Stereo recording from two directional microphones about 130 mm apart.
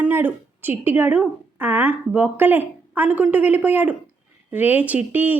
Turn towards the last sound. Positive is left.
turn(degrees=-15)  # may be behind; listen again after turning